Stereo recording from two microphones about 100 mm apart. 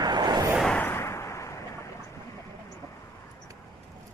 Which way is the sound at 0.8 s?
20° left (ahead or behind).